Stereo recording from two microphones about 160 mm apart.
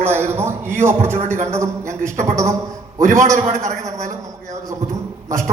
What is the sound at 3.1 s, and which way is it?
Speech, 20° right (ahead or behind).